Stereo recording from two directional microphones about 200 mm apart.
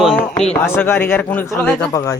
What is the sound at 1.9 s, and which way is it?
Speech, 15° left (ahead or behind).